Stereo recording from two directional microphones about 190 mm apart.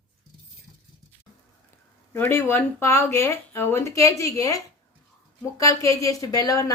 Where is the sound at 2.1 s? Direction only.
10° left (ahead or behind).